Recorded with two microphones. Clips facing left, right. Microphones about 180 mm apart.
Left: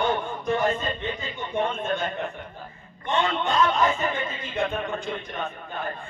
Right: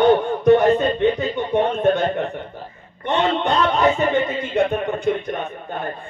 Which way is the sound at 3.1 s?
70° right (ahead or behind).